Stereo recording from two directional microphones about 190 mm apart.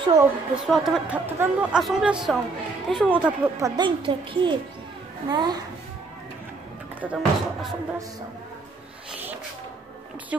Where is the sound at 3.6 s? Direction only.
25° right (ahead or behind).